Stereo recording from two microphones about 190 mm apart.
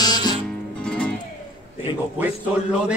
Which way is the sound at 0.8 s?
5° left (ahead or behind).